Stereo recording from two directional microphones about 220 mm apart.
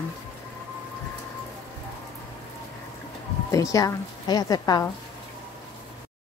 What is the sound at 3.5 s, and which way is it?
A woman's voice, 15° left (ahead or behind).